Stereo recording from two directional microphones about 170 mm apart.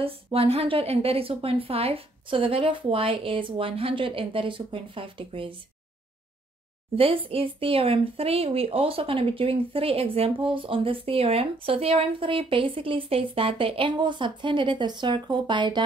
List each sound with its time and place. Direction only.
0.0 s a woman's voice: 35° right (ahead or behind)
7.0 s a woman's voice: 35° right (ahead or behind)